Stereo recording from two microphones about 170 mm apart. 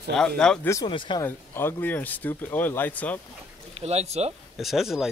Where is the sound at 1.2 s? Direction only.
15° left (ahead or behind).